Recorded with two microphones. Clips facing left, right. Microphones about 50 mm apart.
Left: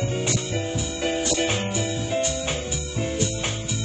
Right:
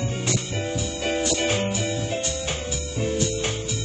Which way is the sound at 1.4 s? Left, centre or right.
Centre.